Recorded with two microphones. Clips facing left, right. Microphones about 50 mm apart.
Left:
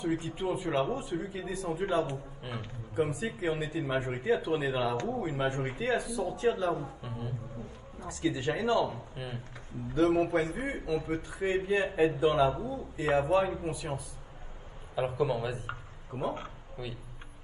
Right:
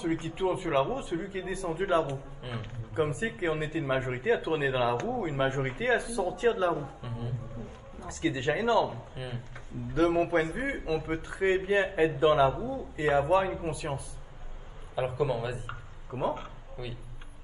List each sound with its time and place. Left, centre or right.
0.0 s a man's voice: right
7.0 s speech: centre
8.1 s a man's voice: right
9.1 s speech: right
9.9 s a man's voice: right
15.1 s speech: centre
16.1 s speech: right